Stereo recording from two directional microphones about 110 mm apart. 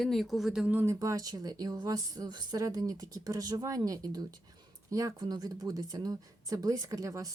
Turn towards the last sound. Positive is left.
turn(degrees=-30)  # may be behind; listen again after turning